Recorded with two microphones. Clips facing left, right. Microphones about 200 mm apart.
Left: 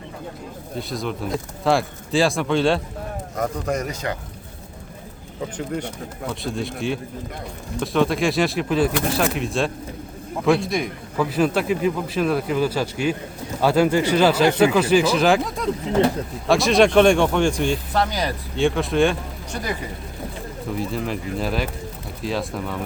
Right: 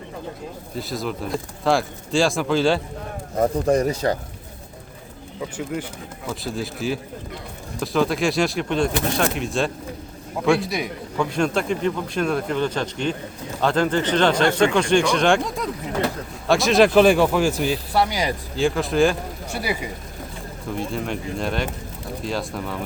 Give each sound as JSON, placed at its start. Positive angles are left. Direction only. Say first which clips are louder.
{"t": 0.8, "sound": "a man's voice", "louder": "even", "side_deg": 0}
{"t": 3.3, "sound": "speech", "louder": "right 6 dB", "side_deg": -30}
{"t": 6.2, "sound": "a man's voice", "louder": "left 1 dB", "side_deg": 0}
{"t": 18.5, "sound": "speech", "louder": "left 1 dB", "side_deg": 0}
{"t": 20.7, "sound": "a man's voice", "louder": "even", "side_deg": 0}